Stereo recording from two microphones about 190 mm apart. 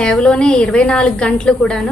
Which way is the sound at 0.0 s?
5° left (ahead or behind).